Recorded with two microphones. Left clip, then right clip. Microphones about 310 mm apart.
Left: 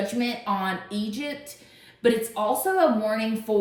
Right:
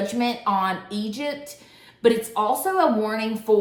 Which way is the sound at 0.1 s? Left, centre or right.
Centre.